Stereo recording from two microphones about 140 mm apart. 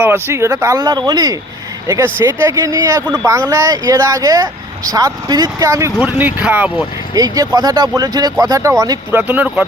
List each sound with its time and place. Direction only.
0.0 s speech: 15° right (ahead or behind)
2.1 s speech: 20° right (ahead or behind)
6.0 s speech: 15° right (ahead or behind)
7.1 s speech: 25° right (ahead or behind)
9.2 s speech: 10° right (ahead or behind)